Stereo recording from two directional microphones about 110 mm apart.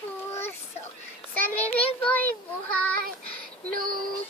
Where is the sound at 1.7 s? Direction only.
60° left (ahead or behind).